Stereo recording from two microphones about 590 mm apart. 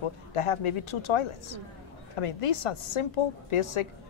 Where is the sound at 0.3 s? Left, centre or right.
Left.